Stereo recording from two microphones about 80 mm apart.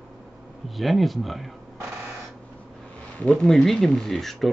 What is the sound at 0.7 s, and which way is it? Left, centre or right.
Speech, centre.